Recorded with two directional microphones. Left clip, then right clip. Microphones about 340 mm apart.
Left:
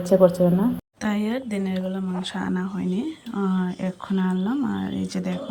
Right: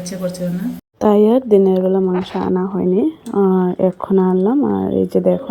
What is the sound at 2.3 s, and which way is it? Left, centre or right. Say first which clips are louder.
Speech: right 10 dB; centre.